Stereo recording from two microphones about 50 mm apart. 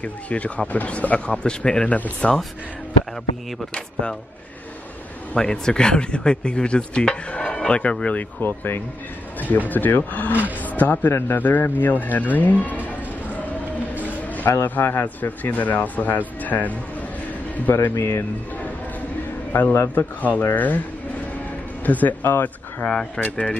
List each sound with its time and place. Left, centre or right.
0.0 s speech: left
1.9 s speech: left
3.7 s speech: centre
5.3 s speech: centre
8.2 s speech: left
14.0 s a sound: left
14.6 s speech: left
17.9 s speech: left
19.5 s speech: left
21.8 s speech: left
22.8 s speech: centre
23.2 s speech: left